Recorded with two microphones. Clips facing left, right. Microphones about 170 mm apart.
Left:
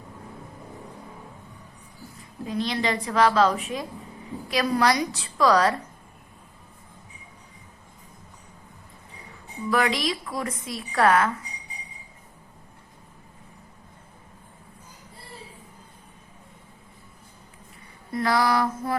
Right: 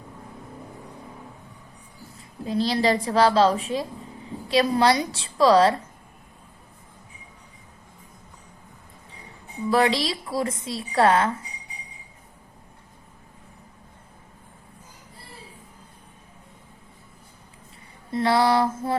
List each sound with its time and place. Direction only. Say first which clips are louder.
2.1 s a woman's voice: right 3 dB; 30° right (ahead or behind)
9.6 s speech: right 3 dB; 30° right (ahead or behind)
18.1 s speech: right 3 dB; 25° right (ahead or behind)